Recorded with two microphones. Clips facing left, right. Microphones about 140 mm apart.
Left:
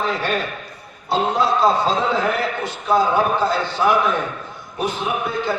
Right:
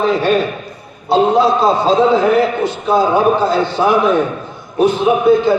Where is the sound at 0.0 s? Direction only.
25° right (ahead or behind).